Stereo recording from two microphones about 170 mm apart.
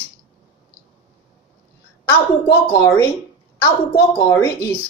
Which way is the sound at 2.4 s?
15° left (ahead or behind).